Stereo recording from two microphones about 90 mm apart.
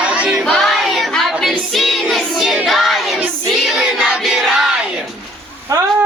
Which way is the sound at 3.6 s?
5° right (ahead or behind).